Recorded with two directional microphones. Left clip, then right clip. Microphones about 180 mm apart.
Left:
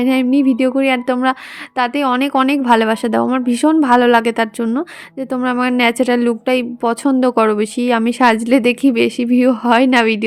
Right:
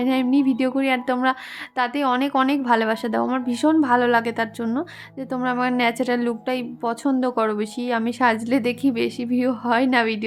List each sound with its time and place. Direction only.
0.0 s a woman's voice: 30° left (ahead or behind)